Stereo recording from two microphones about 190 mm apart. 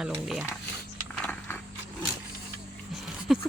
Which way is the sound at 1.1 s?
5° left (ahead or behind).